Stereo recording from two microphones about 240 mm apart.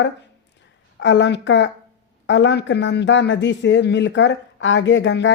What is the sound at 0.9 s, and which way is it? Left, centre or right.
Speech, left.